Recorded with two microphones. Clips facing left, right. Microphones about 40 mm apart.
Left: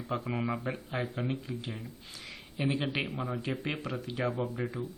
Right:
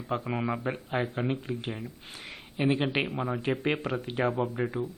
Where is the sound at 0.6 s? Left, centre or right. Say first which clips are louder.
Right 4 dB; right.